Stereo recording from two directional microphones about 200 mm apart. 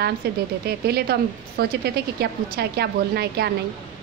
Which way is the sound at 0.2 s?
55° right (ahead or behind).